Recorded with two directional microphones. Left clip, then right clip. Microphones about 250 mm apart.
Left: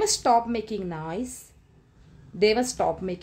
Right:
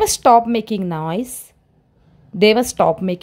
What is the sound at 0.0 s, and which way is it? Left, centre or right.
A woman's voice, right.